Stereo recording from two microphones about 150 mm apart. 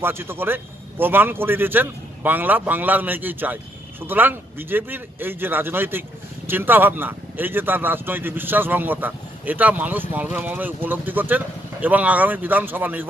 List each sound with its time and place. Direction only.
0.0 s speech: 15° right (ahead or behind)